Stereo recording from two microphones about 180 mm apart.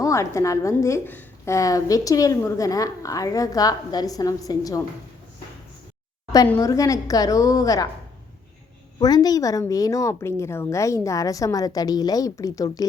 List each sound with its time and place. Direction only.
0.0 s a woman's voice: 15° left (ahead or behind)
6.6 s a woman's voice: 20° left (ahead or behind)
9.0 s a woman's voice: 20° left (ahead or behind)